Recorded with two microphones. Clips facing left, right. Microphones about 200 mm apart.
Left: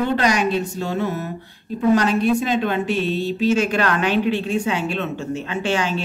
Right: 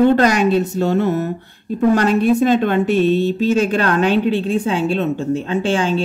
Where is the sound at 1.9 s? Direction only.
50° right (ahead or behind).